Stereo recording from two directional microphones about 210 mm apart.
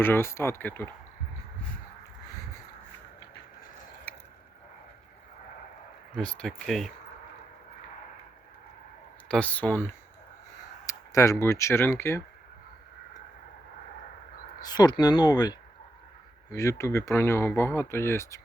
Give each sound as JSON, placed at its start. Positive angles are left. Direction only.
{"t": 0.0, "sound": "speech", "side_deg": 10}
{"t": 6.1, "sound": "speech", "side_deg": 5}
{"t": 9.3, "sound": "speech", "side_deg": 5}
{"t": 14.6, "sound": "speech", "side_deg": 20}